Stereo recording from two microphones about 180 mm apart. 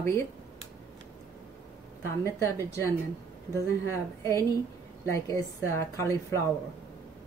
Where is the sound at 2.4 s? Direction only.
15° left (ahead or behind).